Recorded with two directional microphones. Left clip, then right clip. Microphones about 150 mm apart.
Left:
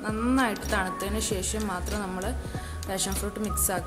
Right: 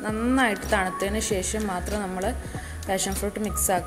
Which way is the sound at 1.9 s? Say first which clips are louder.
Right 3 dB; centre (ahead or behind).